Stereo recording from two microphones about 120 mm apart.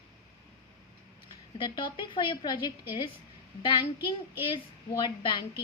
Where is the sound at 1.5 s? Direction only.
40° left (ahead or behind).